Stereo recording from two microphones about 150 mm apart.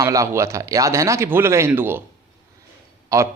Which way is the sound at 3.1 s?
20° right (ahead or behind).